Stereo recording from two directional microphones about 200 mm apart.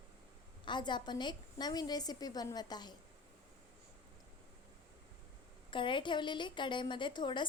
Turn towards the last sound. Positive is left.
turn(degrees=20)  # may be behind; listen again after turning